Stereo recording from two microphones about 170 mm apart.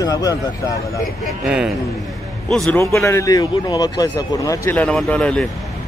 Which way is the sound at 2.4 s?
5° left (ahead or behind).